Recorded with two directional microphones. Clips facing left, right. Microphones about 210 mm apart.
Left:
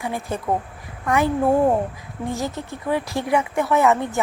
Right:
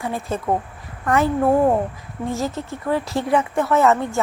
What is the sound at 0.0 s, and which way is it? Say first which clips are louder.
Speech: right 2 dB; 15° left (ahead or behind).